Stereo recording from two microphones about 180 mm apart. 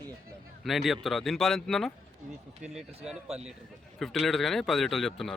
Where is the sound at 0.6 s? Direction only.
Centre (ahead or behind).